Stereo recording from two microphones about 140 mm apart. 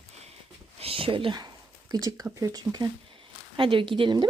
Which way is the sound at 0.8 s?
40° right (ahead or behind).